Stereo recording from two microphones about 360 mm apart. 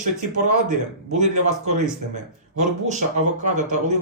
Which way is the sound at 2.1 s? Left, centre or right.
Centre.